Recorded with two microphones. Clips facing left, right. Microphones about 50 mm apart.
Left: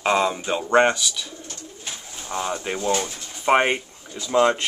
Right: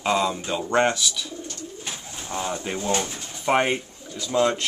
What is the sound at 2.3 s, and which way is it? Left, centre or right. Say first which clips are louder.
Speech: left 2 dB; centre.